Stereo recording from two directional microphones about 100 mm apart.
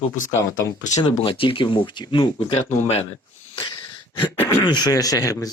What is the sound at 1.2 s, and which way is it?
Speech, 60° left (ahead or behind).